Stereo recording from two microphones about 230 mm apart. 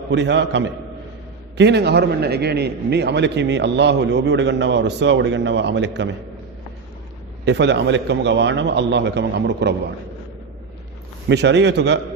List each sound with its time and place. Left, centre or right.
0.1 s a man's voice: right
7.4 s a man's voice: right
11.3 s a man's voice: right